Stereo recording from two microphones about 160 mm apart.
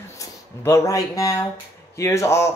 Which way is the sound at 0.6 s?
20° left (ahead or behind).